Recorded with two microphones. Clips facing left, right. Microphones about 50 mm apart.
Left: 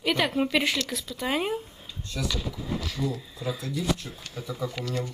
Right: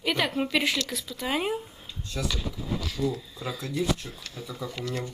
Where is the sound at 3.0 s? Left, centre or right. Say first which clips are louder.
Right 1 dB; centre.